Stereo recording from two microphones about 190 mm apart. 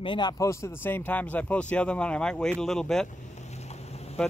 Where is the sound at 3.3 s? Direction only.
35° left (ahead or behind).